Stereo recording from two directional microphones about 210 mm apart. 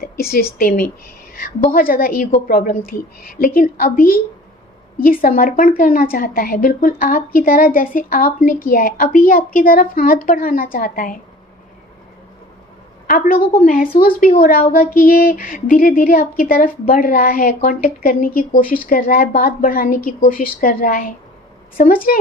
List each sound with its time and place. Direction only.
0.0 s speech: 45° left (ahead or behind)
13.0 s a woman's voice: 45° left (ahead or behind)